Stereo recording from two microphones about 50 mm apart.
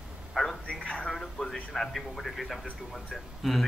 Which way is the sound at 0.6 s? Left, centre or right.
Centre.